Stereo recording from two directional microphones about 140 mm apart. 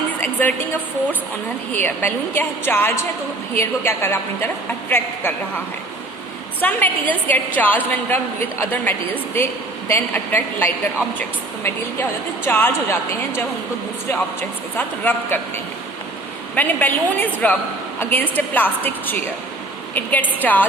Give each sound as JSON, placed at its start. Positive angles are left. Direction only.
{"t": 0.2, "sound": "a woman's voice", "side_deg": 15}
{"t": 6.6, "sound": "a woman's voice", "side_deg": 10}
{"t": 14.8, "sound": "a woman's voice", "side_deg": 15}